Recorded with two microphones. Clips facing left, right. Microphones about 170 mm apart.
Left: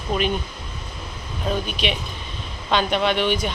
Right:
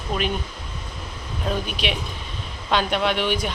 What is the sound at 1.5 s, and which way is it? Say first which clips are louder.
Speech: left 1 dB; 5° right (ahead or behind).